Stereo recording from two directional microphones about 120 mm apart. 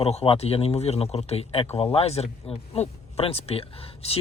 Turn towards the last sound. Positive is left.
turn(degrees=55)  # may be behind; listen again after turning